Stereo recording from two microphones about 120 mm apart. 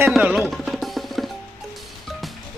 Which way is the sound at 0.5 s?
Centre (ahead or behind).